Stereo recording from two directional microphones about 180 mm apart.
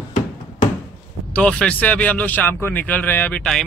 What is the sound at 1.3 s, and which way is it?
A man's voice, 5° left (ahead or behind).